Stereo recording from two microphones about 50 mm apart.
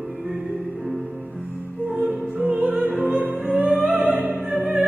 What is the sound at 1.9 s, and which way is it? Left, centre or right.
Music, centre.